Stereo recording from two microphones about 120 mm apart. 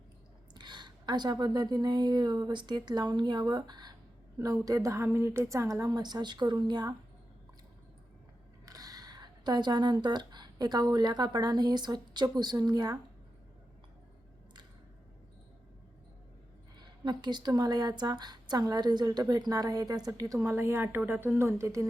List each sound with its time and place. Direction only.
0.5 s a woman's voice: 40° right (ahead or behind)
8.6 s speech: 30° right (ahead or behind)
16.7 s a woman's voice: 35° right (ahead or behind)